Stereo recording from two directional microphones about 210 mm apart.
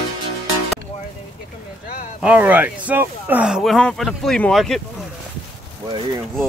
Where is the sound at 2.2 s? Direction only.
5° right (ahead or behind).